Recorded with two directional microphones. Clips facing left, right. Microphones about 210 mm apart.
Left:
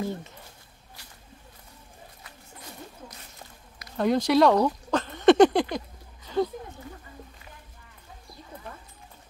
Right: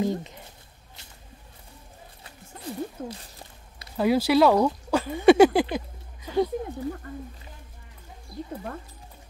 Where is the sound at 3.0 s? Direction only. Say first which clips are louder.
Right 11 dB; 60° right (ahead or behind).